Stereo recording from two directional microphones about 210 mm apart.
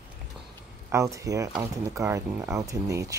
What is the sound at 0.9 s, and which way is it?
Speech, 15° right (ahead or behind).